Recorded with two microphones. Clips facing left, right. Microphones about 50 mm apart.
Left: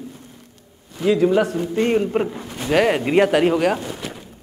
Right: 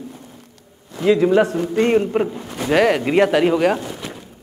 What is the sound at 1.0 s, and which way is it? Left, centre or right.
Speech, right.